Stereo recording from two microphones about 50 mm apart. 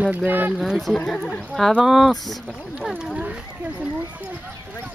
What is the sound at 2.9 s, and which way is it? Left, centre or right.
Speech, centre.